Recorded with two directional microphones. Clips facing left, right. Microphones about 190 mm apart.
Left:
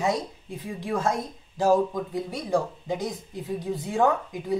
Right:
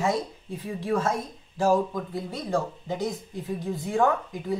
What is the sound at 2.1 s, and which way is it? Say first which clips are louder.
Speech: left 2 dB; 15° left (ahead or behind).